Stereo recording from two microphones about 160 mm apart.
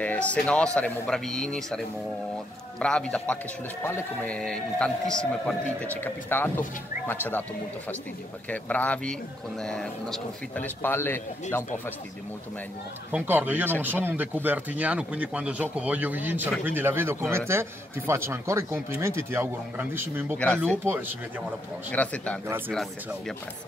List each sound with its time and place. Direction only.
0.0 s a man's voice: 10° left (ahead or behind)
8.5 s a man's voice: 10° left (ahead or behind)
13.1 s speech: 10° right (ahead or behind)
20.3 s a man's voice: 5° left (ahead or behind)
21.9 s a man's voice: 10° left (ahead or behind)